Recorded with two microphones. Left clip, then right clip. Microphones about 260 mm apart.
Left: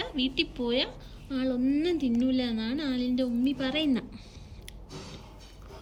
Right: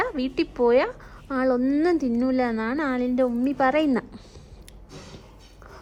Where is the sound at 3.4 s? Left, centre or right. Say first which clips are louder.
Right 8 dB; right.